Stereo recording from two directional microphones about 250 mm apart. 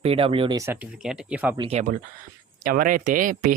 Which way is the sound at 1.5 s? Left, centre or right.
Right.